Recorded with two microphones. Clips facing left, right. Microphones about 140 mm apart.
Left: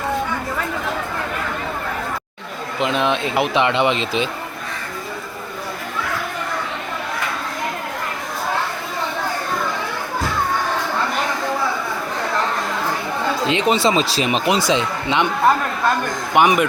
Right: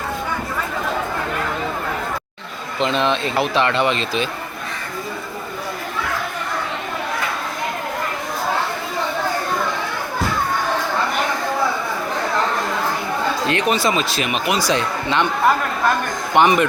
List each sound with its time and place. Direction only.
2.8 s speech: 10° left (ahead or behind)
13.5 s speech: 20° left (ahead or behind)
16.3 s speech: 10° left (ahead or behind)